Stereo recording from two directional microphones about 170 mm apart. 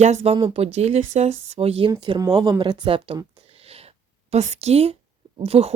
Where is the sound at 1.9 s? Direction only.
25° right (ahead or behind).